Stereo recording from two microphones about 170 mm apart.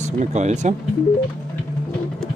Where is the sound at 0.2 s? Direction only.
45° right (ahead or behind).